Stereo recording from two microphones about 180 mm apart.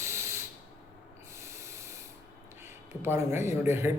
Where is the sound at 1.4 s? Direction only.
15° right (ahead or behind).